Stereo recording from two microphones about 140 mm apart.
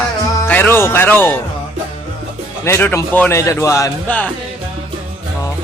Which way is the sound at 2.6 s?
15° left (ahead or behind).